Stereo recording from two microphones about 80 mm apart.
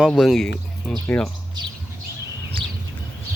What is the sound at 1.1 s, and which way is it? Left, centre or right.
Speech, left.